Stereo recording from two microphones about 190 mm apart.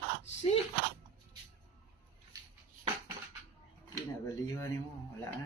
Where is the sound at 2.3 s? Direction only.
20° right (ahead or behind).